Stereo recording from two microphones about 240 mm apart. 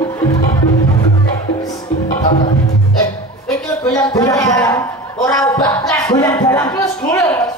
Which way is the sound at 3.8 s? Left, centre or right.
Centre.